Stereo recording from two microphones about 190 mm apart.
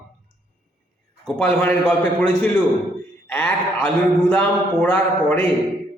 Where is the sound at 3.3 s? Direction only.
10° left (ahead or behind).